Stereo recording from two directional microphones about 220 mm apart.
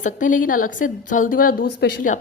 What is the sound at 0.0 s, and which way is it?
Speech, 35° left (ahead or behind).